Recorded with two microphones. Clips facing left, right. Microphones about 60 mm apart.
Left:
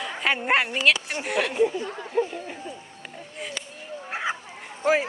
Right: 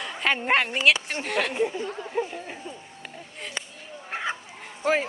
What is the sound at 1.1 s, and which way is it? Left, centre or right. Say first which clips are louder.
Speech: left 1 dB; centre.